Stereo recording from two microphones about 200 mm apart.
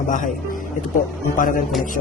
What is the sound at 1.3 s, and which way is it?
Speech, 40° left (ahead or behind).